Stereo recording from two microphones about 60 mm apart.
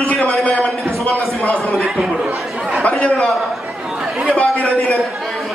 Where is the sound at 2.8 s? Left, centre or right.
Left.